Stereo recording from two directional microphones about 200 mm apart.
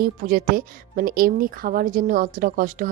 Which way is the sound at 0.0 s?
45° right (ahead or behind).